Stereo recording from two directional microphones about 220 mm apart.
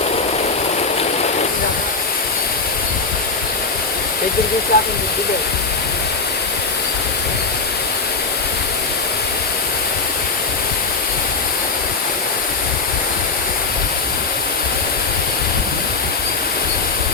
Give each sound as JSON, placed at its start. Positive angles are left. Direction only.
{"t": 4.7, "sound": "speech", "side_deg": 45}